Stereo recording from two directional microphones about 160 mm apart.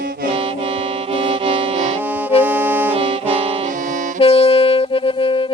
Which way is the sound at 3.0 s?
35° right (ahead or behind).